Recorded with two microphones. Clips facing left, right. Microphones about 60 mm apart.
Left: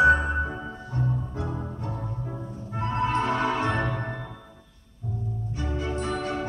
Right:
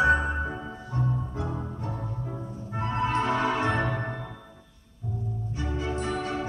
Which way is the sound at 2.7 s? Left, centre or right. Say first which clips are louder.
Left 1 dB; right.